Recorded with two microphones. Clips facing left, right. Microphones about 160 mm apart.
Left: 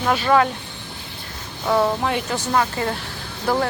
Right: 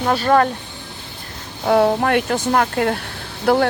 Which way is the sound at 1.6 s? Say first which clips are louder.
Right 4 dB; 50° right (ahead or behind).